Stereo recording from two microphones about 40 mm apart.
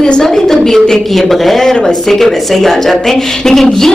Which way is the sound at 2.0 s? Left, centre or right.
Centre.